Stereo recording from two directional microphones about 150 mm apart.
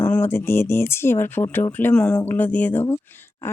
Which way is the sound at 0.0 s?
10° left (ahead or behind).